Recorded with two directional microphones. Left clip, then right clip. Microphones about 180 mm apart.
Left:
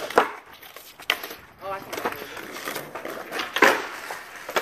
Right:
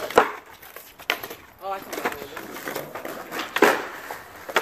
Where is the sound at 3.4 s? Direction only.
65° right (ahead or behind).